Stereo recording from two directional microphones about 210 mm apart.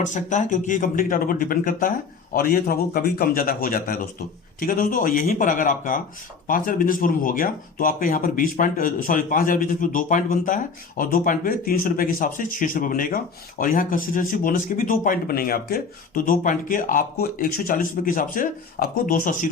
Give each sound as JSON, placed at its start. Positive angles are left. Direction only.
{"t": 0.0, "sound": "a man's voice", "side_deg": 35}